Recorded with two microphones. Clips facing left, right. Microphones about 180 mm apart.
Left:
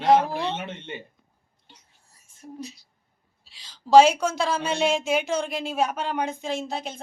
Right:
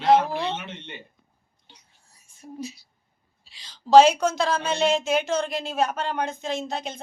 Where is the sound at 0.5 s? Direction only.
45° left (ahead or behind).